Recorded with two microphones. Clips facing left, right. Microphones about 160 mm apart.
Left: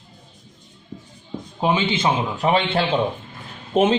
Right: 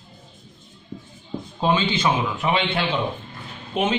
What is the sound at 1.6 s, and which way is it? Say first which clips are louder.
Speech: left 1 dB; 20° left (ahead or behind).